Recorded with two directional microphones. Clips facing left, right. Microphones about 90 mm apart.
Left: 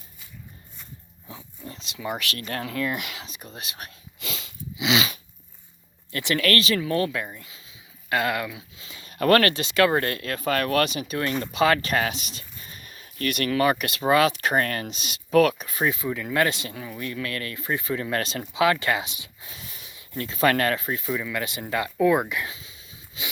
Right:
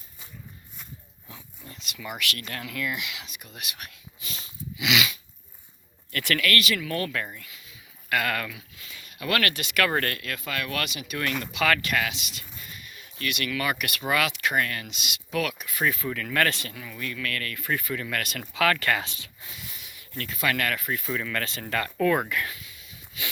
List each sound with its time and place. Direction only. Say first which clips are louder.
1.3 s speech: left 6 dB; 25° left (ahead or behind)
4.2 s sniff: left 6 dB; 90° left
4.8 s dog: left 2 dB; 30° left (ahead or behind)
6.1 s speech: left 2 dB; 25° left (ahead or behind)
6.4 s speech: left 3 dB; 35° left (ahead or behind)
9.1 s speech: left 9 dB; 45° left (ahead or behind)
9.4 s speech: left 5 dB; 30° left (ahead or behind)
16.7 s speech: left 3 dB; 30° left (ahead or behind)
20.4 s speech: left 6 dB; 35° left (ahead or behind)
21.1 s speech: left 3 dB; 10° left (ahead or behind); by 23.2 s 25° left (ahead or behind)